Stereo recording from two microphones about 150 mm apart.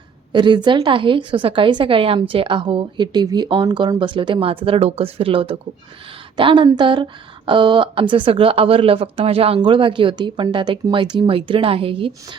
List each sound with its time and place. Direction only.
0.3 s a woman's voice: 30° right (ahead or behind)